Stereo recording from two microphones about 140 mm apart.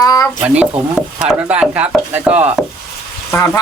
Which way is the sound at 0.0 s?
25° left (ahead or behind).